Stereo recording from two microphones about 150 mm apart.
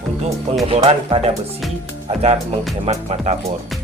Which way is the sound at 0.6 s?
40° right (ahead or behind).